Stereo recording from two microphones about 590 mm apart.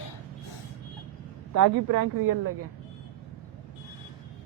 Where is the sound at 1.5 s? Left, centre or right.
Right.